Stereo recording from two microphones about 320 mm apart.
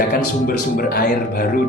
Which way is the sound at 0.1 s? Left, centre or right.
Left.